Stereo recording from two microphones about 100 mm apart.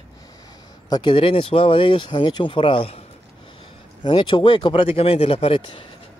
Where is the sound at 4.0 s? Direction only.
55° left (ahead or behind).